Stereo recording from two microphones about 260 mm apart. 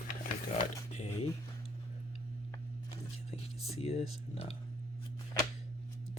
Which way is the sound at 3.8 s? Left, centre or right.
Left.